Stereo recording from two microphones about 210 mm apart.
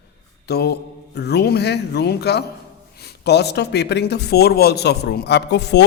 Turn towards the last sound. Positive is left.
turn(degrees=55)  # may be behind; listen again after turning